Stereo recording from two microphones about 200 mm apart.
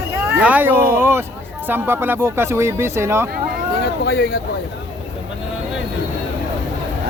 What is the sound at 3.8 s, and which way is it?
Speech, 55° left (ahead or behind).